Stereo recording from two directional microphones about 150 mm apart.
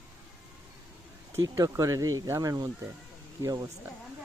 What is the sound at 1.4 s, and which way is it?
Speech, 20° right (ahead or behind).